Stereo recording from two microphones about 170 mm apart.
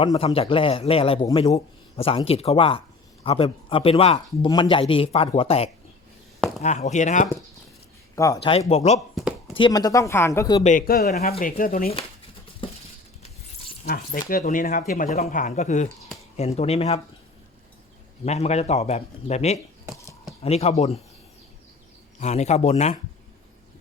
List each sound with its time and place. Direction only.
0.0 s speech: 25° left (ahead or behind); by 7.3 s 45° left (ahead or behind)
8.1 s speech: 20° left (ahead or behind)
8.4 s speech: 35° left (ahead or behind)
9.6 s speech: 25° left (ahead or behind)
10.6 s speech: 50° left (ahead or behind)
12.6 s patter: 30° left (ahead or behind)
13.8 s speech: 60° left (ahead or behind); by 17.0 s 35° left (ahead or behind)
18.3 s speech: 40° left (ahead or behind)
22.2 s speech: 40° left (ahead or behind)